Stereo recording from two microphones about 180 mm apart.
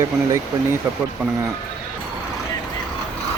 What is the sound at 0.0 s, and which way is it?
Speech, 15° right (ahead or behind).